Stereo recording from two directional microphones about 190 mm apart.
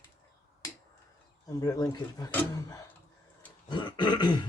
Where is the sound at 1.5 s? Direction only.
20° left (ahead or behind).